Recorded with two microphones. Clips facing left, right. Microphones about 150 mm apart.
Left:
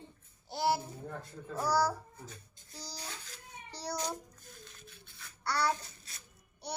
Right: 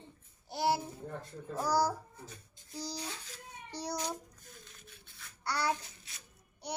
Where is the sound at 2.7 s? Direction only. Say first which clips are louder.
Right 5 dB; 20° right (ahead or behind).